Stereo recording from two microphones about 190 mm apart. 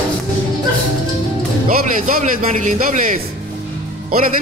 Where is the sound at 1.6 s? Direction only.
40° right (ahead or behind).